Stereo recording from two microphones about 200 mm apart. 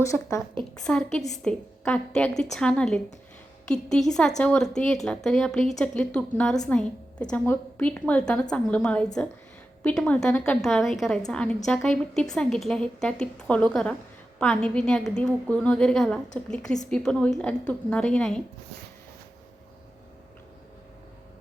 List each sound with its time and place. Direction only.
0.0 s a woman's voice: 15° left (ahead or behind)
0.9 s a woman's voice: 5° left (ahead or behind)